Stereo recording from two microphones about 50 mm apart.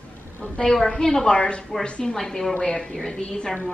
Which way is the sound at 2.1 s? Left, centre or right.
Centre.